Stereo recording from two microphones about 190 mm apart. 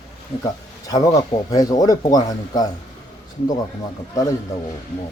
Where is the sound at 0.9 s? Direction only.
20° left (ahead or behind).